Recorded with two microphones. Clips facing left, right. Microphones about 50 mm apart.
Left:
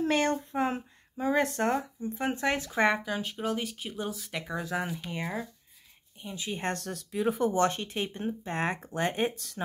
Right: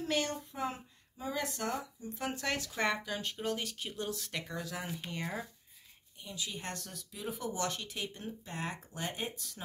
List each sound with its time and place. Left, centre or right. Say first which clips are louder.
0.0 s speech: left 7 dB; left
3.1 s speech: left 5 dB; centre
6.2 s speech: left 8 dB; left
8.3 s speech: left 9 dB; left